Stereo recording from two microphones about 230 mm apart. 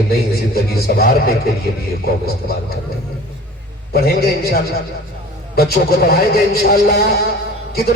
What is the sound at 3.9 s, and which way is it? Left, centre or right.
A man's voice, left.